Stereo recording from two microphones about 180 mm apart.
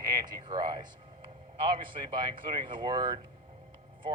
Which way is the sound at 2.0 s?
25° right (ahead or behind).